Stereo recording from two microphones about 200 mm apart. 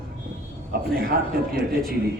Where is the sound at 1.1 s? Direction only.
50° right (ahead or behind).